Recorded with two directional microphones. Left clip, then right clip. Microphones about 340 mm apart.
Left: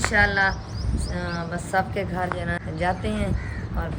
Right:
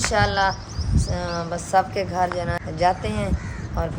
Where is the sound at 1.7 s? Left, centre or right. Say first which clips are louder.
Right 4 dB; centre.